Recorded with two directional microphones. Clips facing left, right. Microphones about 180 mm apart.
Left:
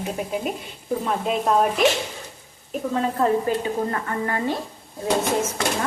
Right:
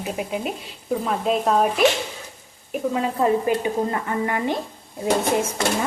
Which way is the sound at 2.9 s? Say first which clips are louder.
Even; 10° right (ahead or behind).